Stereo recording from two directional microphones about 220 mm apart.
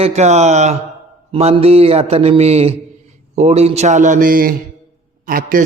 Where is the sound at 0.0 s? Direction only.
30° right (ahead or behind).